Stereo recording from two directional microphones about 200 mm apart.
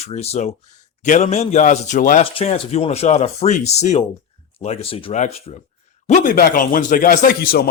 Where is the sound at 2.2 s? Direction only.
30° left (ahead or behind); by 7.7 s 50° left (ahead or behind).